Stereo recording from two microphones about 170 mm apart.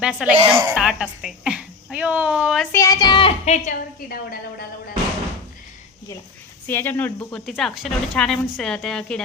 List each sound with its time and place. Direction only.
0.0 s speech: 5° right (ahead or behind)
0.3 s a woman's voice: 30° right (ahead or behind)
0.7 s speech: 5° right (ahead or behind)
2.7 s speech: 20° left (ahead or behind); by 3.8 s 40° left (ahead or behind)
4.0 s a woman's voice: 60° left (ahead or behind)
6.7 s speech: 10° left (ahead or behind)